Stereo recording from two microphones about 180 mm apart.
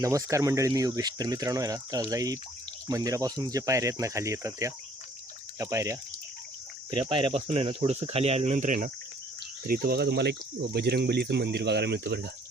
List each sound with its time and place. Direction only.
0.0 s speech: 15° right (ahead or behind); by 12.3 s 65° right (ahead or behind)